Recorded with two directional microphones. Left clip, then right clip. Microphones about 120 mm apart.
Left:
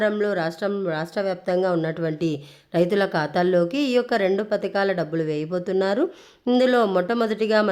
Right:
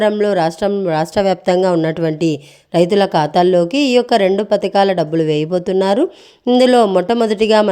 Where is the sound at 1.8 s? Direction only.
55° right (ahead or behind).